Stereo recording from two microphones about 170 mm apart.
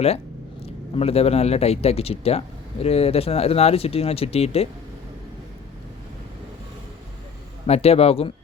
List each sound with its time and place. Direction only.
0.6 s speech: 35° left (ahead or behind)
7.7 s speech: 35° left (ahead or behind)